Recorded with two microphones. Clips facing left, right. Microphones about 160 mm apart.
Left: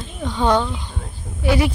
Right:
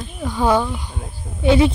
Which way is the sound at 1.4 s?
25° right (ahead or behind).